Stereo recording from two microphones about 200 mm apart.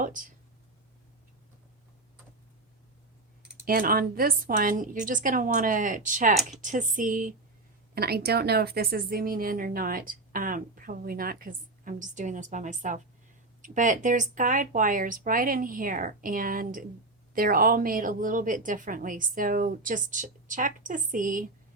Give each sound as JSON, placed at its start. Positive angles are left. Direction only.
{"t": 0.0, "sound": "speech", "side_deg": -40}
{"t": 3.7, "sound": "a woman's voice", "side_deg": -45}